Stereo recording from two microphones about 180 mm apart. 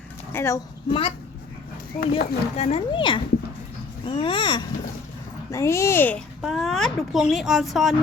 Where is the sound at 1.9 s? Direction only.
50° left (ahead or behind).